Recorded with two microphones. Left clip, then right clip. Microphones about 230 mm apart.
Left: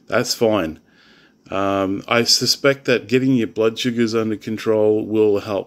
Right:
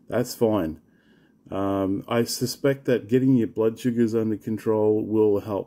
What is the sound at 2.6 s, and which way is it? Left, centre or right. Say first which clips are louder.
Speech: left 6 dB; centre.